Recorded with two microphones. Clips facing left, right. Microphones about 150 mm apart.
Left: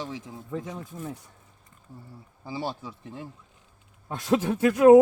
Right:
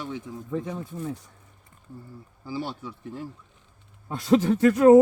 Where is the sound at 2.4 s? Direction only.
25° left (ahead or behind).